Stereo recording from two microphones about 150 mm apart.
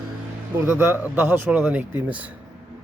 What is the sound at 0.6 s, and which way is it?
Speech, 15° right (ahead or behind).